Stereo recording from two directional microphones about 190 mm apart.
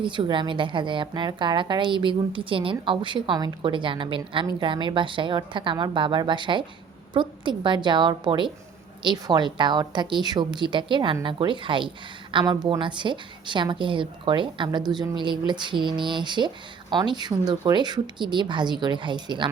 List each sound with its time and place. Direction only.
0.0 s a woman's voice: 25° right (ahead or behind)